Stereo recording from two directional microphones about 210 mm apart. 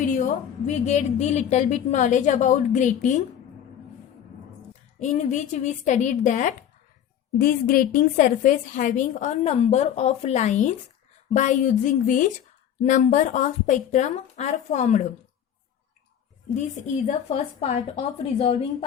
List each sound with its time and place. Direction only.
0.7 s a woman's voice: 35° left (ahead or behind)
4.9 s a woman's voice: 35° left (ahead or behind)
16.6 s a woman's voice: 35° left (ahead or behind)